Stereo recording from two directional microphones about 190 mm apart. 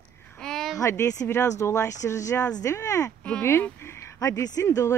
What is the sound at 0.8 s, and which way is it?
Speech, 15° left (ahead or behind).